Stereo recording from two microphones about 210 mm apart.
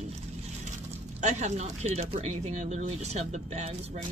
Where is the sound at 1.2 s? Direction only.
35° right (ahead or behind).